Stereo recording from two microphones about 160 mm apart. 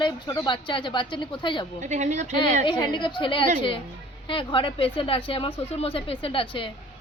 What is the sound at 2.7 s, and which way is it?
Speech, 30° left (ahead or behind).